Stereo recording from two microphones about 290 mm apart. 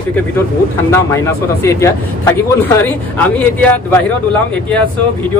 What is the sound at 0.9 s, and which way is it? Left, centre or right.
A man's voice, centre.